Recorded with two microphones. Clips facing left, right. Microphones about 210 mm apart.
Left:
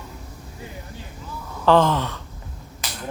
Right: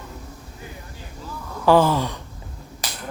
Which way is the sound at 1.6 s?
10° right (ahead or behind).